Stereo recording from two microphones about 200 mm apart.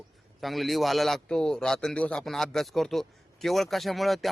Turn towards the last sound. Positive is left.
turn(degrees=0)  # may be behind; listen again after turning